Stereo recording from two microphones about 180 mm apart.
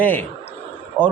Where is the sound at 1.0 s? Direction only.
10° right (ahead or behind).